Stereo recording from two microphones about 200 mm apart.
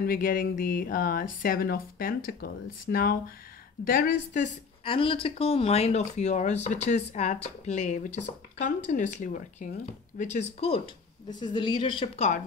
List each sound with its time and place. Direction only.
0.0 s speech: 45° left (ahead or behind)
4.8 s speech: 25° left (ahead or behind)
11.2 s speech: 20° left (ahead or behind)